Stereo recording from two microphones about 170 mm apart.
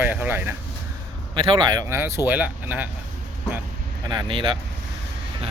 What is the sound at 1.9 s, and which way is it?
Speech, 15° right (ahead or behind).